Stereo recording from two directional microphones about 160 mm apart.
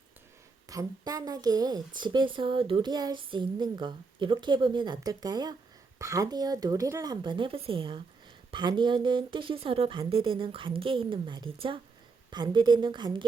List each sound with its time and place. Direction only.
0.7 s a woman's voice: 20° right (ahead or behind)